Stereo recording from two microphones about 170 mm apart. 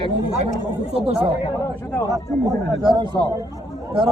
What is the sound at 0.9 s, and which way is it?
Speech, 35° right (ahead or behind).